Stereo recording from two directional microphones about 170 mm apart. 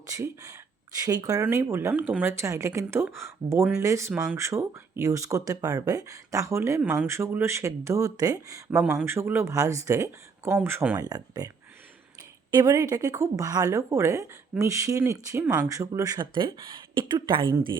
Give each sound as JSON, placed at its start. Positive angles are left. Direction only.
{"t": 0.1, "sound": "speech", "side_deg": -20}
{"t": 8.8, "sound": "speech", "side_deg": -5}
{"t": 12.5, "sound": "speech", "side_deg": -20}